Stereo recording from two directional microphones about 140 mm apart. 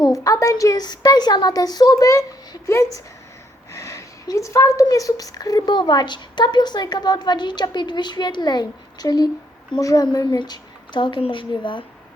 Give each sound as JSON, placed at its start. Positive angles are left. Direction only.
{"t": 0.3, "sound": "a woman's voice", "side_deg": 25}